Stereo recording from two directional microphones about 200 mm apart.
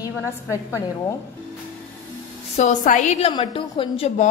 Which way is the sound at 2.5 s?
35° left (ahead or behind).